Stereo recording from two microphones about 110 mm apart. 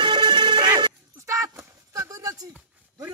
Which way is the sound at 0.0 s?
45° right (ahead or behind).